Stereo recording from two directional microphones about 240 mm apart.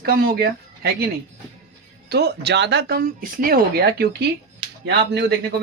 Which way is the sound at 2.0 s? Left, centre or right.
Right.